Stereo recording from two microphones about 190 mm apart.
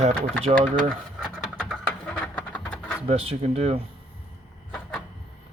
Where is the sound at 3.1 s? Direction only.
30° right (ahead or behind).